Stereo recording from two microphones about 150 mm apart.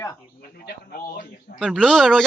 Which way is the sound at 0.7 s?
90° left.